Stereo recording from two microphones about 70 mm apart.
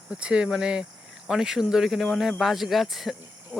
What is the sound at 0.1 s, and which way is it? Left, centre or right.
Speech, centre.